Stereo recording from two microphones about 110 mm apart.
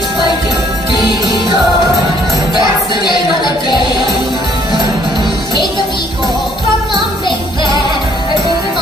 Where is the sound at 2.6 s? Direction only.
45° left (ahead or behind).